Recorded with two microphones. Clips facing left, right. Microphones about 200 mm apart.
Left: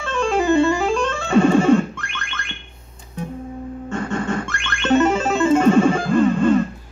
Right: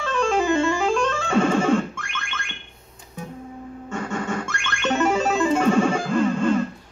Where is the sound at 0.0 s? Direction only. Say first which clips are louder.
Left 2 dB; 5° left (ahead or behind).